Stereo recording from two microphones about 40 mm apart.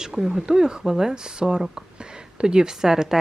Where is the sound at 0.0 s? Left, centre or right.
Centre.